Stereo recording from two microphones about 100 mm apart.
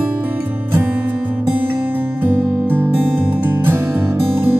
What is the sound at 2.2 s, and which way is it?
Music, 20° right (ahead or behind).